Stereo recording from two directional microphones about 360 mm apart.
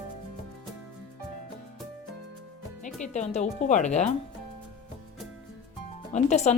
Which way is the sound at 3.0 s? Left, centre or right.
Centre.